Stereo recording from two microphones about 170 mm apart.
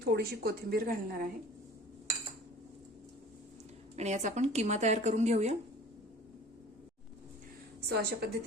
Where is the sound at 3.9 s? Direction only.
40° right (ahead or behind).